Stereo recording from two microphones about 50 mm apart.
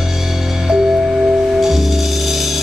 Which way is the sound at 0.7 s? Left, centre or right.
Centre.